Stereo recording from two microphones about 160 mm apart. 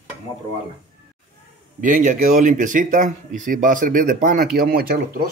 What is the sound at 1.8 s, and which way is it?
Speech, 55° right (ahead or behind).